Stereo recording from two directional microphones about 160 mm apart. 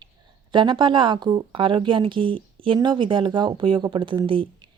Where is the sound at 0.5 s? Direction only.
30° right (ahead or behind).